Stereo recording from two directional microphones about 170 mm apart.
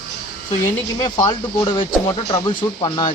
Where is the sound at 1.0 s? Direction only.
25° left (ahead or behind).